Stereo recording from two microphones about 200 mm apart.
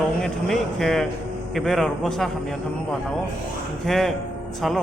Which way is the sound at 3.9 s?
Centre (ahead or behind).